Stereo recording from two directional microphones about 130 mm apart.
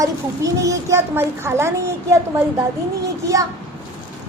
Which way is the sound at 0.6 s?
25° right (ahead or behind).